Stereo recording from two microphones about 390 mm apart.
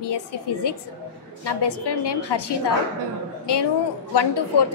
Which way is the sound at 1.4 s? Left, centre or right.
Left.